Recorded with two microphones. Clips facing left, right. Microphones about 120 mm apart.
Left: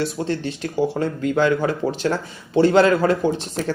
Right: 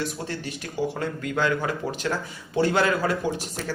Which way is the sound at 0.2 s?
35° left (ahead or behind).